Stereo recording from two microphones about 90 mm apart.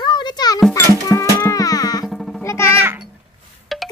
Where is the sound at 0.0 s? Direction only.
55° left (ahead or behind).